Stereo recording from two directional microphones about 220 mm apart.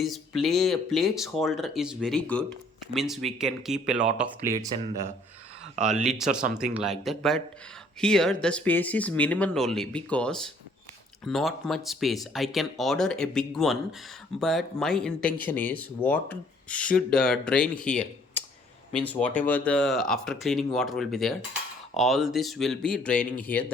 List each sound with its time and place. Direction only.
0.0 s speech: centre (ahead or behind)
5.8 s speech: centre (ahead or behind)